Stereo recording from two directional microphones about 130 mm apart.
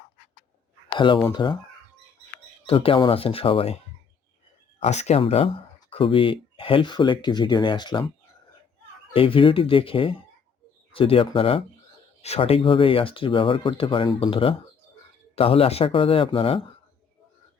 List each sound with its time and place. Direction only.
0.9 s speech: 40° left (ahead or behind)
2.6 s speech: 45° left (ahead or behind)
4.8 s speech: 60° left (ahead or behind)
5.2 s speech: 45° left (ahead or behind)
9.1 s speech: 45° left (ahead or behind)